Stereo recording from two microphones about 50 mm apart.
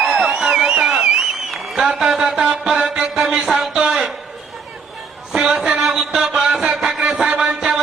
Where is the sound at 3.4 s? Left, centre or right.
Centre.